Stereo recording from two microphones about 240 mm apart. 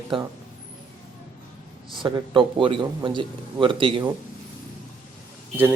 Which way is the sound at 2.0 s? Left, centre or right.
Centre.